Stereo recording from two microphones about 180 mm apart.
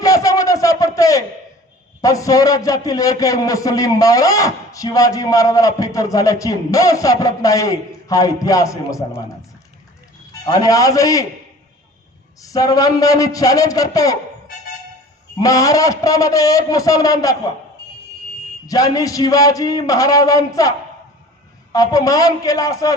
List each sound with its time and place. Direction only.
0.0 s a sound: 20° left (ahead or behind)
2.0 s a man's voice: 20° left (ahead or behind)
10.4 s a man's voice: 20° left (ahead or behind)
12.4 s a man's voice: 20° left (ahead or behind)
15.4 s a man's voice: 20° left (ahead or behind)
18.7 s a man's voice: 20° left (ahead or behind)